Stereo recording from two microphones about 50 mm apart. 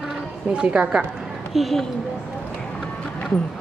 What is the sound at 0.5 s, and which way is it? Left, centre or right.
Speech, right.